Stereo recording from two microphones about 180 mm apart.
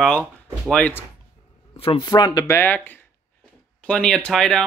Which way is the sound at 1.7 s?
30° left (ahead or behind).